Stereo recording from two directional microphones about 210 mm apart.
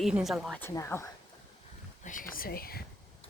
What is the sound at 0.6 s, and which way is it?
Speech, 15° left (ahead or behind).